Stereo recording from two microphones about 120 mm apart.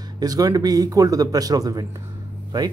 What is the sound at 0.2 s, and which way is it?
Speech, 30° right (ahead or behind).